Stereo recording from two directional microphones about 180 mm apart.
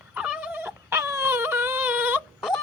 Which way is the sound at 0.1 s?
5° right (ahead or behind).